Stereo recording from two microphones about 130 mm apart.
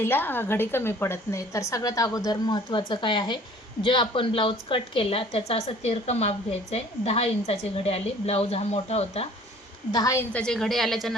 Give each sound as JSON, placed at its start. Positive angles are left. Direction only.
{"t": 0.0, "sound": "a woman's voice", "side_deg": 15}
{"t": 9.9, "sound": "a woman's voice", "side_deg": 25}
{"t": 10.3, "sound": "a woman's voice", "side_deg": 5}